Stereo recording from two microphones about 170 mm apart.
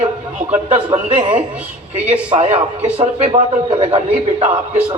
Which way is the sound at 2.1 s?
40° right (ahead or behind).